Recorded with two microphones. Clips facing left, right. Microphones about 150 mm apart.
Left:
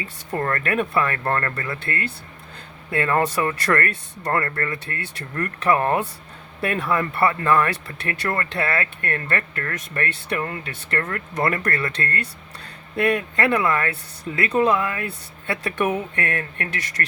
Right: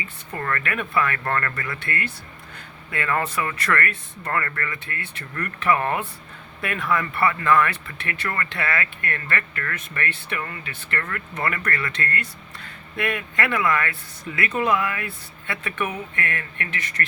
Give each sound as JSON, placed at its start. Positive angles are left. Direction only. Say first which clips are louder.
{"t": 0.3, "sound": "speech", "louder": "left 4 dB", "side_deg": 40}
{"t": 15.4, "sound": "speech", "louder": "left 5 dB", "side_deg": 45}